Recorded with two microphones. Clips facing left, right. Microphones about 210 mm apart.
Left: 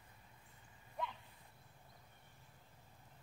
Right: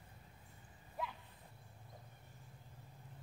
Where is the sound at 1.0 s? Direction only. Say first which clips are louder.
Even; 5° right (ahead or behind).